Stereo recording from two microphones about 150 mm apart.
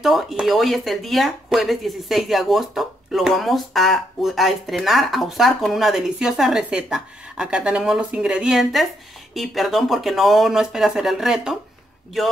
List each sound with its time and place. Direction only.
0.0 s speech: centre (ahead or behind)